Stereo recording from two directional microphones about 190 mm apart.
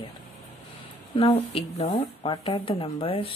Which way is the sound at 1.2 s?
30° left (ahead or behind).